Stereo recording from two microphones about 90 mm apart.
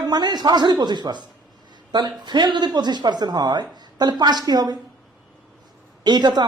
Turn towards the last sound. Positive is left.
turn(degrees=-55)  # may be behind; listen again after turning